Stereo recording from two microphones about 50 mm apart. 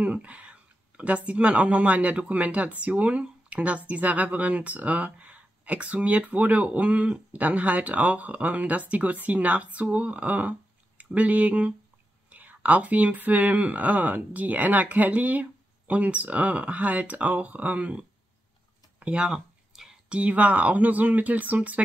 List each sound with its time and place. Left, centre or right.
0.0 s speech: right
19.7 s whispering: centre
20.1 s speech: right